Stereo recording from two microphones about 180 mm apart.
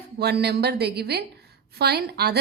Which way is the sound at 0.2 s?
65° right (ahead or behind).